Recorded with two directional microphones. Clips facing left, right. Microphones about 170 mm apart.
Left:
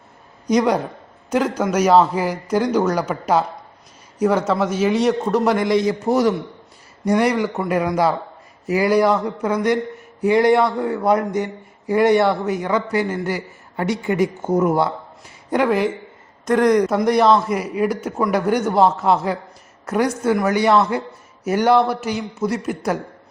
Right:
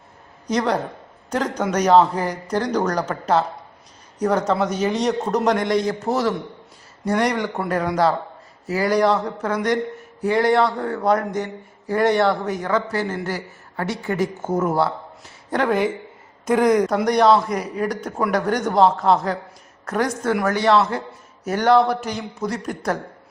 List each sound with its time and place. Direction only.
0.4 s a man's voice: 10° left (ahead or behind)
8.6 s a man's voice: 15° left (ahead or behind)